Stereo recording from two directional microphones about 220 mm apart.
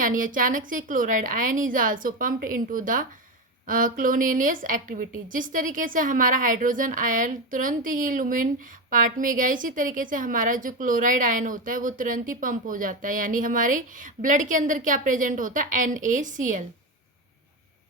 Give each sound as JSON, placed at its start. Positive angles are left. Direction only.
{"t": 0.0, "sound": "a woman's voice", "side_deg": -35}